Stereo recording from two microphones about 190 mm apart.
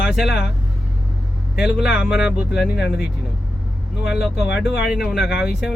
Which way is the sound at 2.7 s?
60° left (ahead or behind).